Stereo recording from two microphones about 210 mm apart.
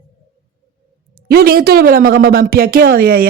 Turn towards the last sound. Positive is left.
turn(degrees=-45)  # may be behind; listen again after turning